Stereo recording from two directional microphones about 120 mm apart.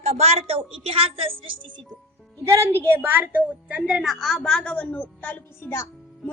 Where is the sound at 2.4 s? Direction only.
20° right (ahead or behind).